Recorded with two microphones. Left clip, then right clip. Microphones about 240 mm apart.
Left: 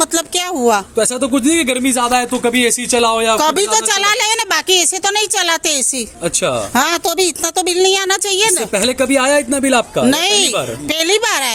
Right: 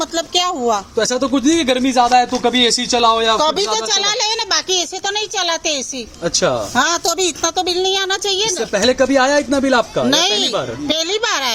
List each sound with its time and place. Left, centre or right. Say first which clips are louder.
0.0 s a sound: even; left
0.9 s speech: left 1 dB; centre
3.3 s speech: left 2 dB; left
6.2 s speech: right 1 dB; centre
6.7 s speech: left 4 dB; left
8.7 s speech: right 1 dB; centre
10.1 s speech: left 2 dB; left